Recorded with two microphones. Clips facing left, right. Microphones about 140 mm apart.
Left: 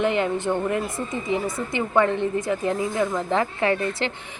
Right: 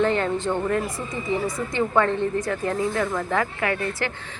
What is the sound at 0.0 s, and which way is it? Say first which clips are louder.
Speech: even; 15° left (ahead or behind).